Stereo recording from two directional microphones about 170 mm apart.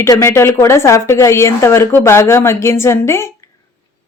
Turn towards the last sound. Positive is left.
turn(degrees=15)  # may be behind; listen again after turning